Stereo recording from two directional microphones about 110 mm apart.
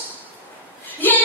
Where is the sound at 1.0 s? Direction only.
15° left (ahead or behind).